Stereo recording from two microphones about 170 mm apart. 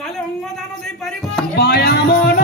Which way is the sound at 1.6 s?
75° left (ahead or behind).